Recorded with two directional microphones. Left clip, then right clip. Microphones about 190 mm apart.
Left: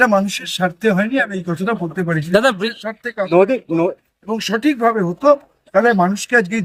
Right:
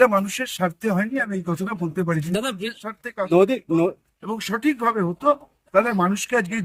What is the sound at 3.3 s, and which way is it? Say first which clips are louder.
Speech: left 4 dB; 60° right (ahead or behind).